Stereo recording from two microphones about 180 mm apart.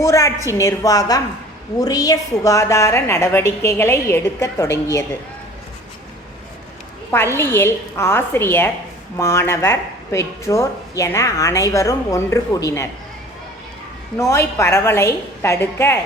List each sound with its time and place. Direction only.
0.0 s a woman's voice: 15° left (ahead or behind)
7.3 s a woman's voice: 15° left (ahead or behind)
14.2 s a woman's voice: 15° left (ahead or behind)